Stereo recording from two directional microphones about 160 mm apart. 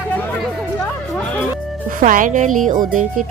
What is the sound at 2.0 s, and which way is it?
Speech, 55° right (ahead or behind).